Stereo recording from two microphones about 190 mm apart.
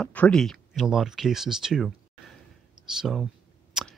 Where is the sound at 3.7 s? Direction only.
5° right (ahead or behind).